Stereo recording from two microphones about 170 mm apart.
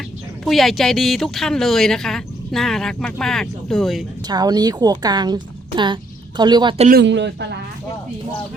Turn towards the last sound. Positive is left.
turn(degrees=-90)